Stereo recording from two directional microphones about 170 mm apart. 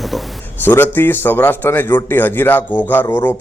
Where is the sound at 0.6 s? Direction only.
10° left (ahead or behind).